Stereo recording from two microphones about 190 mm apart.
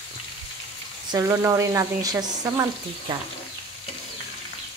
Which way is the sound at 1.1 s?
15° right (ahead or behind).